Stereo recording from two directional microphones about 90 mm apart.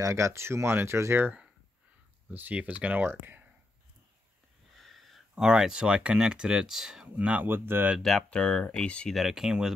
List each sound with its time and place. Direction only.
0.0 s speech: 35° right (ahead or behind)
2.3 s speech: 15° right (ahead or behind)
4.7 s speech: centre (ahead or behind); by 7.9 s 25° right (ahead or behind)
8.0 s speech: 5° left (ahead or behind)
9.1 s speech: 5° right (ahead or behind)